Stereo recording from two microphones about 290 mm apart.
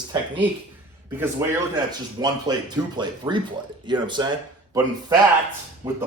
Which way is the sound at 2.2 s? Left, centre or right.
Centre.